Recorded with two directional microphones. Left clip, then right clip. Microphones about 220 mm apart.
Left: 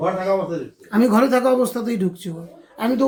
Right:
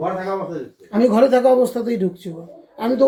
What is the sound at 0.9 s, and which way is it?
A man's voice, 30° left (ahead or behind).